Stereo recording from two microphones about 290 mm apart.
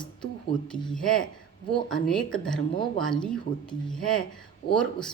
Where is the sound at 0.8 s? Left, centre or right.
Centre.